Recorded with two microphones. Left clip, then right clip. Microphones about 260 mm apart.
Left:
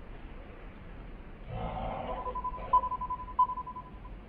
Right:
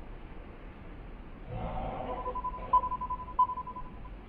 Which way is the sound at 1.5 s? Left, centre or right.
Left.